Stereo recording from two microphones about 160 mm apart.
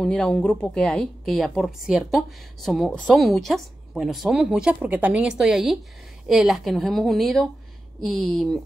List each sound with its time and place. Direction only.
0.0 s a woman's voice: 5° left (ahead or behind)